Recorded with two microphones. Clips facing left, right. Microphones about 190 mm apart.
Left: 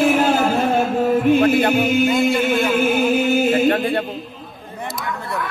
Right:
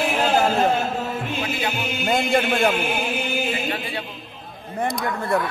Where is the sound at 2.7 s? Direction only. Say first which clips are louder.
Left 7 dB; 45° left (ahead or behind).